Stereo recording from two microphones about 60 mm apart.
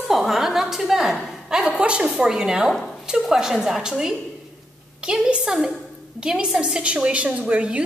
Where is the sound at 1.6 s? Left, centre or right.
Centre.